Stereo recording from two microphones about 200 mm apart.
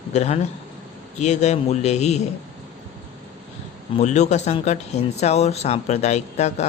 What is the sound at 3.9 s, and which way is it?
Speech, 35° left (ahead or behind).